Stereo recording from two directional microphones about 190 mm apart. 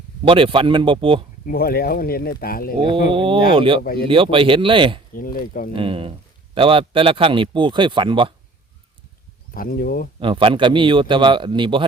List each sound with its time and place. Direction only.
0.3 s a man's voice: 30° right (ahead or behind)
1.5 s speech: 55° left (ahead or behind)
2.8 s a man's voice: 25° right (ahead or behind)
3.8 s speech: 55° left (ahead or behind)
4.1 s a man's voice: 25° right (ahead or behind)
5.1 s speech: 50° left (ahead or behind)
5.7 s a man's voice: 25° right (ahead or behind)
9.6 s speech: 50° left (ahead or behind)
10.2 s a man's voice: 25° right (ahead or behind)